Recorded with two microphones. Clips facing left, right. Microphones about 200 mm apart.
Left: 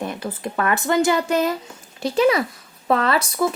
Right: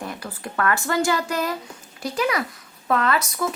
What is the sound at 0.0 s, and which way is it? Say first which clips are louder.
Speech: left 5 dB; 20° left (ahead or behind).